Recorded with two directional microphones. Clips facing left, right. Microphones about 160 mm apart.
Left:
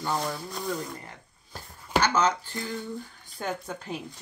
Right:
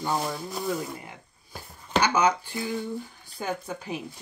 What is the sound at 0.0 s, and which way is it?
Speech, 10° right (ahead or behind).